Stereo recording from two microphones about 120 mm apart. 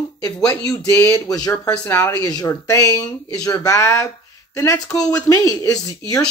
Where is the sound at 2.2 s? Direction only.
30° left (ahead or behind).